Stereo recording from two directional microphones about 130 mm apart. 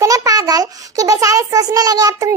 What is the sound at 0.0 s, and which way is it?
A child's voice, 25° right (ahead or behind).